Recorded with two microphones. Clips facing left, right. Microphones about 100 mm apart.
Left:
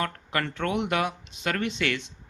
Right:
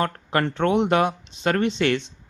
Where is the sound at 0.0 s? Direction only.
35° right (ahead or behind).